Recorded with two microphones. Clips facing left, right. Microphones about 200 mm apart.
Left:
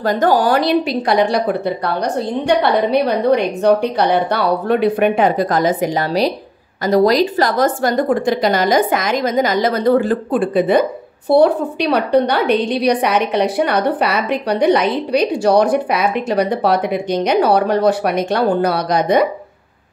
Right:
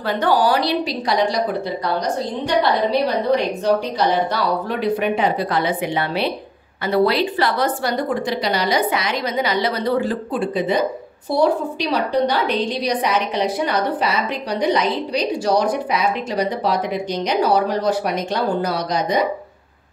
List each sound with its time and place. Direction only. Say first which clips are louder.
0.0 s a woman's voice: left 3 dB; 45° left (ahead or behind); by 19.2 s 60° left (ahead or behind)